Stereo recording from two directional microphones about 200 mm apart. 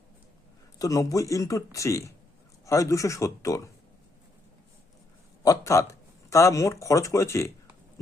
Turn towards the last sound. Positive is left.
turn(degrees=15)  # may be behind; listen again after turning